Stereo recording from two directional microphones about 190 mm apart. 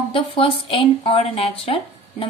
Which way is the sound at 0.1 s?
30° left (ahead or behind).